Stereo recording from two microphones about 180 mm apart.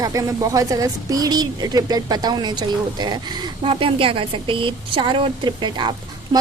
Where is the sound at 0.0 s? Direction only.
20° right (ahead or behind).